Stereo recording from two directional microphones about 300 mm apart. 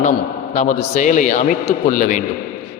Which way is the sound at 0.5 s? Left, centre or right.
Left.